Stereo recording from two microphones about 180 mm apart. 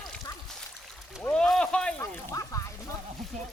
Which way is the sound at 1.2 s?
5° left (ahead or behind).